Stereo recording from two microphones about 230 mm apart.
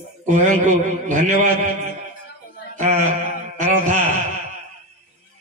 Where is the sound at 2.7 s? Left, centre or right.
Right.